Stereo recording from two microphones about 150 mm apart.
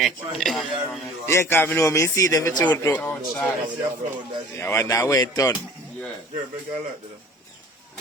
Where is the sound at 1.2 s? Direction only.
15° left (ahead or behind).